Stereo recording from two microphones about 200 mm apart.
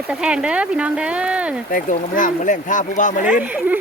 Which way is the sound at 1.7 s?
45° left (ahead or behind).